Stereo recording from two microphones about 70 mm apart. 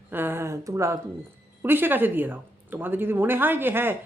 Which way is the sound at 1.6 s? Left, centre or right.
Right.